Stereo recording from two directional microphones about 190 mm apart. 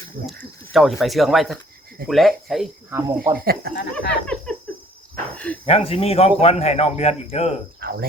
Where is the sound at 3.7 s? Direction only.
65° left (ahead or behind).